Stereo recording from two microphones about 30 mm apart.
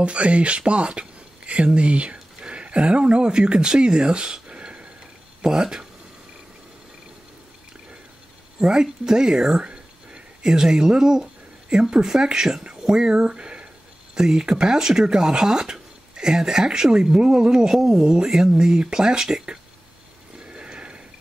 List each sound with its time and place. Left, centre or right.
0.0 s speech: right
4.5 s a sound: right
5.4 s speech: right
8.5 s speech: right
9.6 s whispering: right
10.4 s speech: right
12.9 s speech: right
14.1 s speech: right
16.9 s speech: right
20.3 s a sound: right